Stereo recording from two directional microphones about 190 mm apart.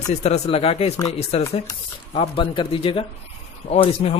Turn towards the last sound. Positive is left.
turn(degrees=30)  # may be behind; listen again after turning